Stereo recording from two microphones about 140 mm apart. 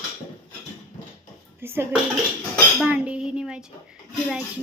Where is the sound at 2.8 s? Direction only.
10° right (ahead or behind).